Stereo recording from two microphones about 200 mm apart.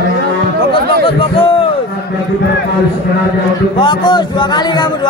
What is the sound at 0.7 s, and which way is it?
Speech, 25° left (ahead or behind).